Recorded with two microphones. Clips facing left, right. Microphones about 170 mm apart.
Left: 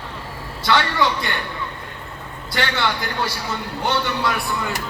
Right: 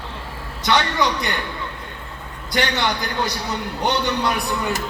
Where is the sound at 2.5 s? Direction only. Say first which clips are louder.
Right 1 dB; 20° right (ahead or behind).